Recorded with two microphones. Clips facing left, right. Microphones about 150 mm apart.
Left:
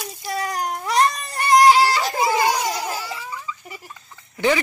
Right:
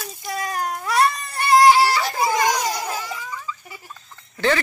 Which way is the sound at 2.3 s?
10° left (ahead or behind).